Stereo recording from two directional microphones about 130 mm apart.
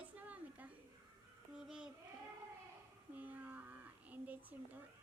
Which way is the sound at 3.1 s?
15° right (ahead or behind).